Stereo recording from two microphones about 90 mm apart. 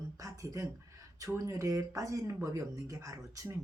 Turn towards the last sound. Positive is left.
turn(degrees=-40)  # may be behind; listen again after turning